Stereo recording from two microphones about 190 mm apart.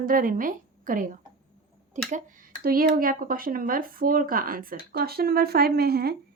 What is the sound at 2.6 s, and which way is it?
Speech, 50° right (ahead or behind).